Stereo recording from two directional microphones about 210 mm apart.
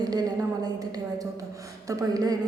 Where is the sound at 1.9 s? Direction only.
15° right (ahead or behind).